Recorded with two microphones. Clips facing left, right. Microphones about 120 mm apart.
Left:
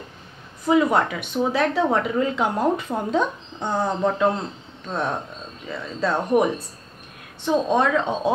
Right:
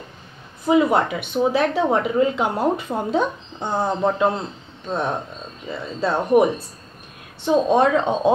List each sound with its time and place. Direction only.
0.7 s speech: 10° right (ahead or behind)
3.7 s speech: 25° right (ahead or behind)
4.8 s speech: 15° right (ahead or behind)